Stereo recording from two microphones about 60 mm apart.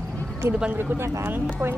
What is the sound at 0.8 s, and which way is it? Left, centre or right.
Speech, right.